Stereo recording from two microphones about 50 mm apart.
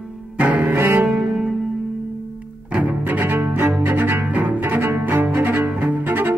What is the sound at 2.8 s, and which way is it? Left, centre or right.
Cello, right.